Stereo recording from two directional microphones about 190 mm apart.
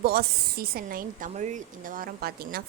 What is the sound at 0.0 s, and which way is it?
Speech, 50° right (ahead or behind).